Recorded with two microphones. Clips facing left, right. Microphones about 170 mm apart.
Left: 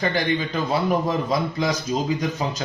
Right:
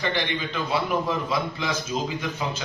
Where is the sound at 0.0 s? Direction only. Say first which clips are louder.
Left 4 dB; 45° left (ahead or behind).